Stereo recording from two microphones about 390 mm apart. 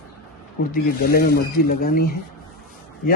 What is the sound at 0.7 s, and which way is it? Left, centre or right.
Speech, left.